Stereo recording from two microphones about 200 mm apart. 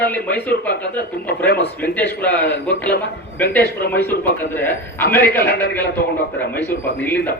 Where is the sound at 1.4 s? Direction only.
55° left (ahead or behind).